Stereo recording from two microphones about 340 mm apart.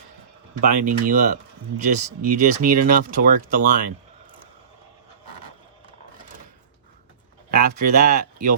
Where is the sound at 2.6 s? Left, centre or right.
Right.